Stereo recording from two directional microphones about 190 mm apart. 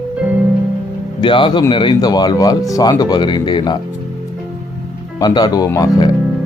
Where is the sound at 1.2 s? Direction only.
25° left (ahead or behind).